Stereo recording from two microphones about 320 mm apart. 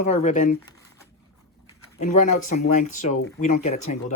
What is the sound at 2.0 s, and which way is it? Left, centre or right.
Speech, left.